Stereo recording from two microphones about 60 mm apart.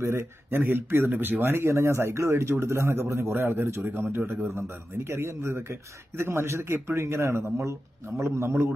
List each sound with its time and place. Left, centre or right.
0.0 s speech: right
0.5 s speech: right